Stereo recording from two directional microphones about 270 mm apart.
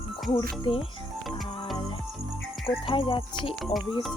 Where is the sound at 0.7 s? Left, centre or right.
Centre.